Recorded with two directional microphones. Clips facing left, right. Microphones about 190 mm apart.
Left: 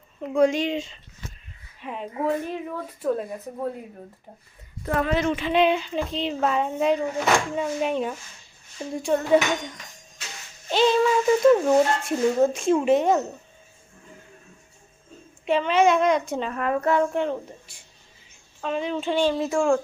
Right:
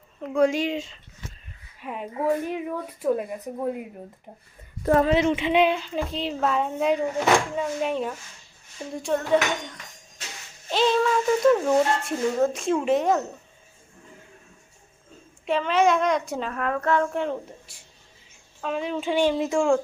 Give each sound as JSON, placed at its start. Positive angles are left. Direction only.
{"t": 0.2, "sound": "speech", "side_deg": 0}
{"t": 4.9, "sound": "speech", "side_deg": -25}
{"t": 5.5, "sound": "speech", "side_deg": 0}
{"t": 15.4, "sound": "speech", "side_deg": 0}